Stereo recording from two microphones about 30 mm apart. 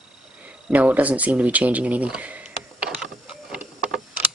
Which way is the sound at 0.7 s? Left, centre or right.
Right.